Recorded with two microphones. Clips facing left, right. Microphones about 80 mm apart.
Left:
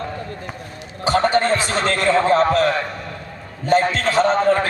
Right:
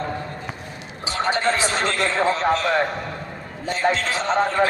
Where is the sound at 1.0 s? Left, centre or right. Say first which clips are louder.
Left 5 dB; left.